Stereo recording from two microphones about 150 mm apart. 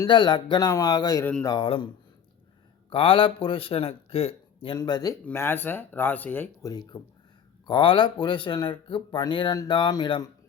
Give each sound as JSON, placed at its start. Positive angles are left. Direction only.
{"t": 0.0, "sound": "speech", "side_deg": 30}
{"t": 1.2, "sound": "speech", "side_deg": 10}
{"t": 1.5, "sound": "speech", "side_deg": 35}
{"t": 2.9, "sound": "speech", "side_deg": 35}
{"t": 5.2, "sound": "speech", "side_deg": 15}
{"t": 7.7, "sound": "speech", "side_deg": 35}